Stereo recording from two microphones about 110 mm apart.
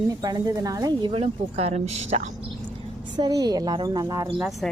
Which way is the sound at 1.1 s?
65° right (ahead or behind).